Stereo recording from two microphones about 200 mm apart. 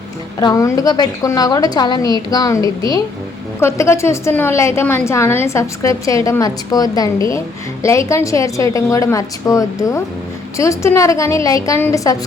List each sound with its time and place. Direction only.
0.3 s a woman's voice: 15° left (ahead or behind)